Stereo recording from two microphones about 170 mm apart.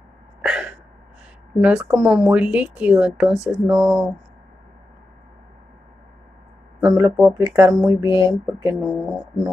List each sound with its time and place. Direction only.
0.4 s a sound: 5° right (ahead or behind)
1.6 s speech: 5° right (ahead or behind)
6.8 s speech: 20° right (ahead or behind)
8.7 s speech: 5° right (ahead or behind)